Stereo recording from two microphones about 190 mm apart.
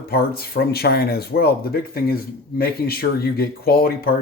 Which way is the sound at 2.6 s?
55° left (ahead or behind).